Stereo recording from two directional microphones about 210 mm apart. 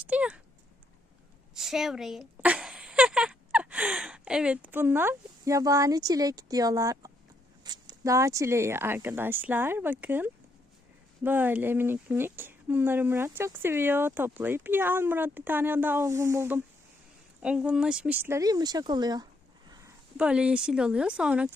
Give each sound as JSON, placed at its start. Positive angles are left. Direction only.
{"t": 0.1, "sound": "speech", "side_deg": -5}
{"t": 1.5, "sound": "speech", "side_deg": 0}
{"t": 7.6, "sound": "a sound", "side_deg": -20}
{"t": 8.0, "sound": "speech", "side_deg": -15}
{"t": 20.1, "sound": "speech", "side_deg": -5}